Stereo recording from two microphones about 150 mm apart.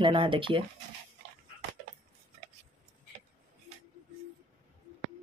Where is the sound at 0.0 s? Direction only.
35° right (ahead or behind).